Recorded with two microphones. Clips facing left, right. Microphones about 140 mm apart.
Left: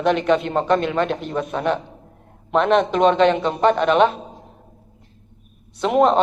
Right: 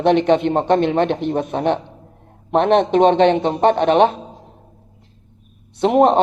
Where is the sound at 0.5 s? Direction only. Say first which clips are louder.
Right 2 dB; 25° right (ahead or behind).